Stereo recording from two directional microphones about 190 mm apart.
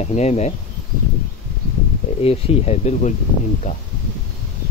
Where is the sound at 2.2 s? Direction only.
35° left (ahead or behind).